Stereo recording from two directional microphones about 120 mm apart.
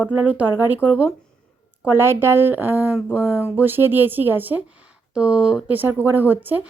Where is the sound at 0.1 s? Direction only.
10° right (ahead or behind).